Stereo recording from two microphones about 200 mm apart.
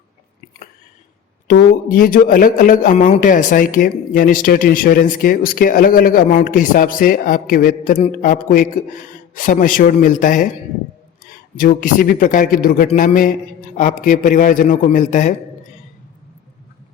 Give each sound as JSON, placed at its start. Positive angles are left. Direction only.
{"t": 1.5, "sound": "a man's voice", "side_deg": 45}